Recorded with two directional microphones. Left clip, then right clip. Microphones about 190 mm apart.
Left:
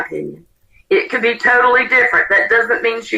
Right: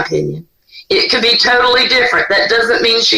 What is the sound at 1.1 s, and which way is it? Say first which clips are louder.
A woman's voice: right 3 dB; 30° right (ahead or behind).